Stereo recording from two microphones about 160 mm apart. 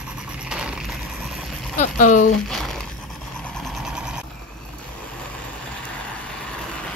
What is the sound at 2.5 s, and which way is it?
Crumpling, centre (ahead or behind).